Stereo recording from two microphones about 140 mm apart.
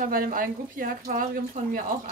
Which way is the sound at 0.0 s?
85° right.